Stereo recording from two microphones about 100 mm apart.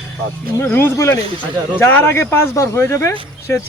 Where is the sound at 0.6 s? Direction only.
20° left (ahead or behind).